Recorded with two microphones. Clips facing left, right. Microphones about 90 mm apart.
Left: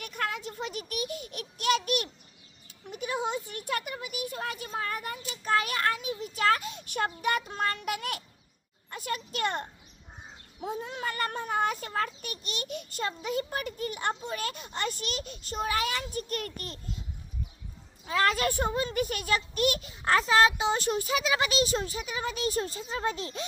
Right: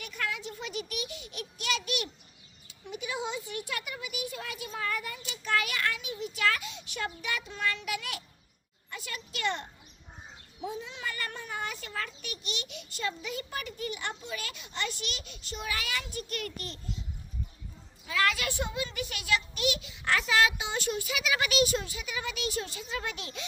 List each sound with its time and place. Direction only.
0.0 s a sound: 50° left (ahead or behind)
2.6 s a child's voice: 50° left (ahead or behind)
18.0 s a child's voice: 40° left (ahead or behind)